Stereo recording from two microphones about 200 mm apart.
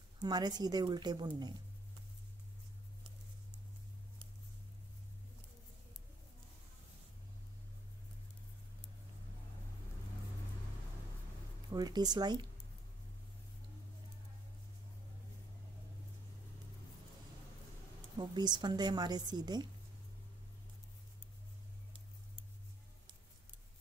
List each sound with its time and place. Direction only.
0.2 s a woman's voice: 20° right (ahead or behind)
11.7 s a woman's voice: 20° right (ahead or behind)
18.1 s a woman's voice: 20° right (ahead or behind)